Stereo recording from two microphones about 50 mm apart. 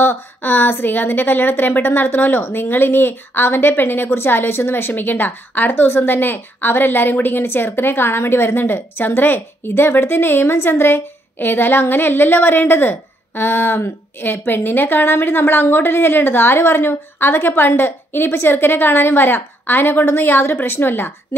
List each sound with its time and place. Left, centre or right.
0.0 s a woman's voice: left